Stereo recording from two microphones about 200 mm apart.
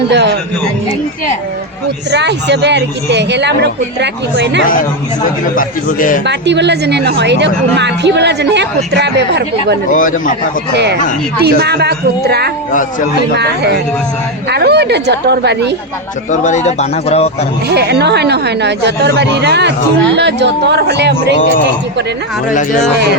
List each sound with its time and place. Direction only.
0.1 s a woman's voice: 60° right (ahead or behind)
2.0 s a woman's voice: 60° right (ahead or behind)
5.5 s a man's voice: 45° left (ahead or behind)
6.2 s a woman's voice: 60° right (ahead or behind)
9.9 s speech: 40° left (ahead or behind)
11.4 s a woman's voice: 55° right (ahead or behind)
16.3 s speech: 35° left (ahead or behind)
17.7 s a woman's voice: 55° right (ahead or behind)
22.4 s speech: 40° left (ahead or behind)